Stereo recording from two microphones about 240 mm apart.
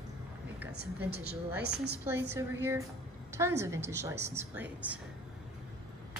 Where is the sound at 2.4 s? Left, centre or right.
Centre.